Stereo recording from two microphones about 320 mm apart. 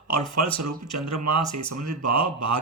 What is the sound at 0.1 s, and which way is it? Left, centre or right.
Speech, right.